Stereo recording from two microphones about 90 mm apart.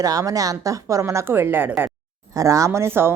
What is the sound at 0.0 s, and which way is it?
Speech, 40° right (ahead or behind).